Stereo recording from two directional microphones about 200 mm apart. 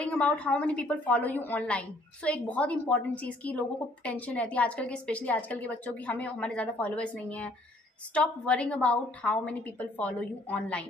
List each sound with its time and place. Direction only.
0.0 s a woman's voice: 5° left (ahead or behind)